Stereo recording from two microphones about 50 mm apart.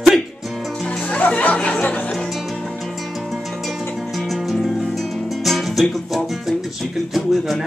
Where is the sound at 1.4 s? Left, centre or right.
Left.